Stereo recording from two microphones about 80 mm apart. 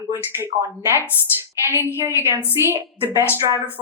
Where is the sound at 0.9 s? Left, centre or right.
Right.